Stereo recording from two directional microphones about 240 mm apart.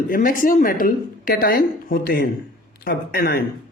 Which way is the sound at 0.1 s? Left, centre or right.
Left.